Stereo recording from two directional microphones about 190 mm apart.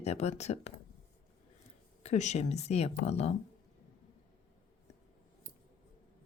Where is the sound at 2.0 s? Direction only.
35° left (ahead or behind).